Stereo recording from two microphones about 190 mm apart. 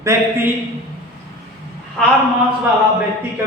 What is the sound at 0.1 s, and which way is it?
Speech, 15° right (ahead or behind).